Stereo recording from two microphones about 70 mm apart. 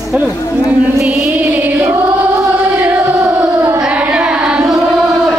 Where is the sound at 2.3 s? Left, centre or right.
Right.